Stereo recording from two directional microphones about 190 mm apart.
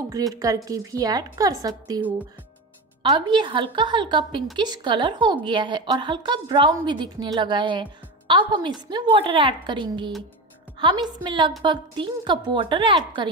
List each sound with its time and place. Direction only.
0.1 s speech: 15° right (ahead or behind)
3.0 s a woman's voice: 25° right (ahead or behind)